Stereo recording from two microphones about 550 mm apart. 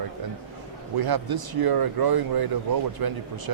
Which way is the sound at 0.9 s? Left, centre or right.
Right.